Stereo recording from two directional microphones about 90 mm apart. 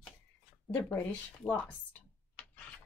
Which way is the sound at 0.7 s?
20° left (ahead or behind).